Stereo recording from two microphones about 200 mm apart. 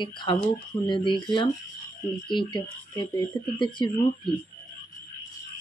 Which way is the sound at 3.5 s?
25° left (ahead or behind).